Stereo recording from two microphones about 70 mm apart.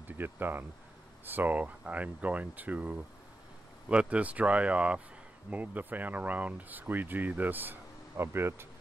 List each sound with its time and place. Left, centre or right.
0.0 s speech: right